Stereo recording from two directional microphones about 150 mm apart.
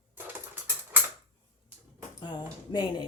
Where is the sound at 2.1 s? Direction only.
30° left (ahead or behind).